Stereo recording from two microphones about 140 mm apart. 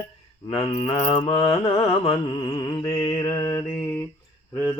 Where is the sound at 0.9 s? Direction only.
45° left (ahead or behind).